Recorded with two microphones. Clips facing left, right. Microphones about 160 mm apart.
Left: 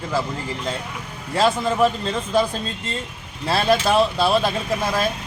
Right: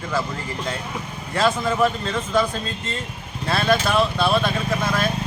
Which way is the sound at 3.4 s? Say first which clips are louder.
Left 2 dB; 30° left (ahead or behind).